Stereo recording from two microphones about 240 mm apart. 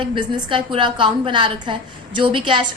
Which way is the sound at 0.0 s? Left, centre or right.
Centre.